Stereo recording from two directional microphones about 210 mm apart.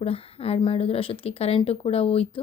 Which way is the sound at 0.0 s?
25° left (ahead or behind).